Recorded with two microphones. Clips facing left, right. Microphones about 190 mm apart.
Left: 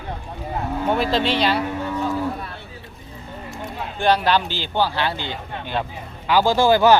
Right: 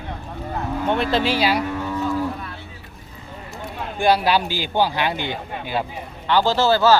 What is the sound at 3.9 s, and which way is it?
Speech, 10° right (ahead or behind).